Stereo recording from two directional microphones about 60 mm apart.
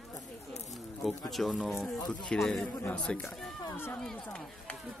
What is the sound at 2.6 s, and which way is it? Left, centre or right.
Speech, left.